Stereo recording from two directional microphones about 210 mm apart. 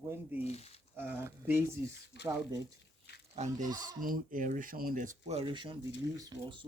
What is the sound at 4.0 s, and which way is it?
Speech, 40° right (ahead or behind).